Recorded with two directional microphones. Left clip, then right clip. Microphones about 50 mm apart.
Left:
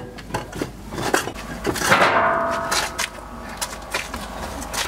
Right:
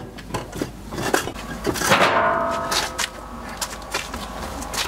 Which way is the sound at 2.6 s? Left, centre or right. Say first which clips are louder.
Even; left.